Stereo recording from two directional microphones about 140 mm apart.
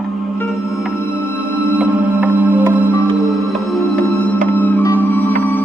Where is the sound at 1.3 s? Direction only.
10° right (ahead or behind).